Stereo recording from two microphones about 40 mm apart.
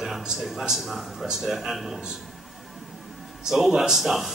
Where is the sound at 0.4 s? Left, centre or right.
Centre.